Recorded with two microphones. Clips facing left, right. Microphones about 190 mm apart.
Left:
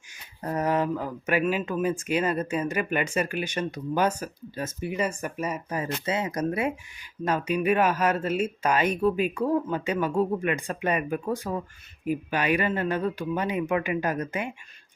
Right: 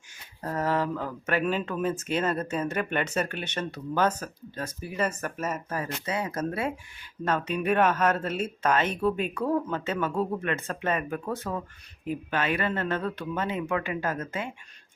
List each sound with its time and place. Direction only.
0.1 s speech: 15° left (ahead or behind)
4.6 s speech: 25° left (ahead or behind)
4.9 s speech: 15° left (ahead or behind)
5.8 s speech: 25° left (ahead or behind)